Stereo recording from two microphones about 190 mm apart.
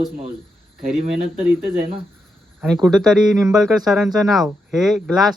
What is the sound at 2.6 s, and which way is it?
Speech, centre (ahead or behind).